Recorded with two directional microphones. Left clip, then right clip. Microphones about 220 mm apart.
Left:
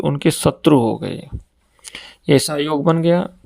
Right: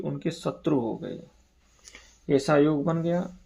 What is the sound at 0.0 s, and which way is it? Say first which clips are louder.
Speech: left 14 dB; 40° left (ahead or behind).